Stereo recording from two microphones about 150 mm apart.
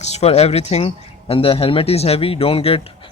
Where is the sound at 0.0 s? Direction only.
45° left (ahead or behind).